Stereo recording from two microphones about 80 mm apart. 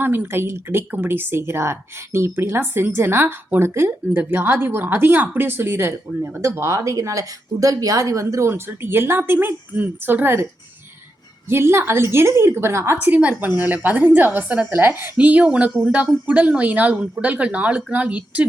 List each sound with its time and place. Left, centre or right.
0.0 s a woman's voice: right
13.0 s speech: centre